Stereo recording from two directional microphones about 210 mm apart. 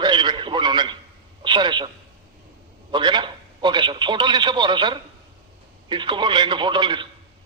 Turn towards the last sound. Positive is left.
turn(degrees=-20)  # may be behind; listen again after turning